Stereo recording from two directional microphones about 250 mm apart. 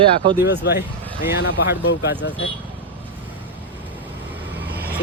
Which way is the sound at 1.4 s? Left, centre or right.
Left.